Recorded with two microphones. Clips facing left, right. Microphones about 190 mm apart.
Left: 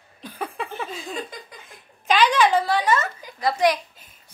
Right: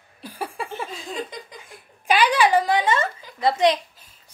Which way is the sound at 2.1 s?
10° right (ahead or behind).